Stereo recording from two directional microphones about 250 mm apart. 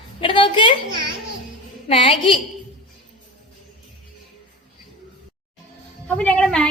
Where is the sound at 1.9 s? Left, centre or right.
Left.